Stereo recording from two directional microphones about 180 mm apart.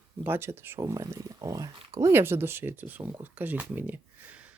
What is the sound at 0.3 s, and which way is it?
Speech, 10° right (ahead or behind).